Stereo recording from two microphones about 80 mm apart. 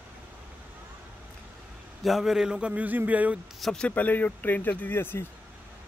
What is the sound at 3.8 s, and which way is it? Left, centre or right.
Speech, left.